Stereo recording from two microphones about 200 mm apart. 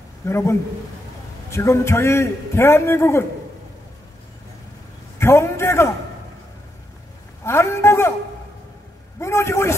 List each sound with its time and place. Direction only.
0.2 s a man's voice: 15° left (ahead or behind)
5.2 s a man's voice: 15° left (ahead or behind)
7.4 s a man's voice: 15° left (ahead or behind)
9.2 s a man's voice: 15° left (ahead or behind)